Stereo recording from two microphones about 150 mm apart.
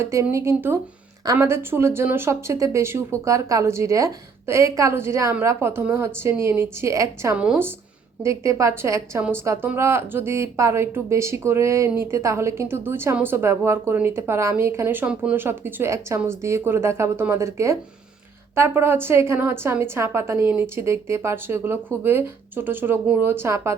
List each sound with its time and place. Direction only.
0.0 s speech: 20° right (ahead or behind)
7.3 s speech: 5° right (ahead or behind)
8.2 s speech: 20° right (ahead or behind)